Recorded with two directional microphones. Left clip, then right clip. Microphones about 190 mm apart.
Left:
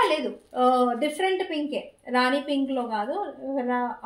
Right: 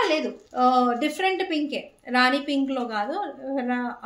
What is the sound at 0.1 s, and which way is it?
A woman's voice, 15° right (ahead or behind).